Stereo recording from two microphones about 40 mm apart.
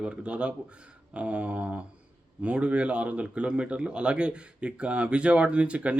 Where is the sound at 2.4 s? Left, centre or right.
Right.